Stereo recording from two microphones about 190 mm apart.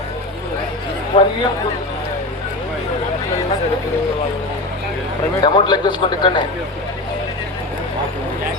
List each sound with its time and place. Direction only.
1.1 s speech: 30° left (ahead or behind)
5.4 s a man's voice: 25° left (ahead or behind)